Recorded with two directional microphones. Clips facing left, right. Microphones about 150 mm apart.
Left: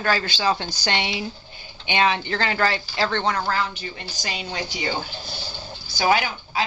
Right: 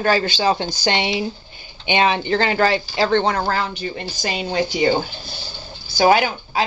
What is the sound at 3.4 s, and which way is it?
Speech, 45° right (ahead or behind).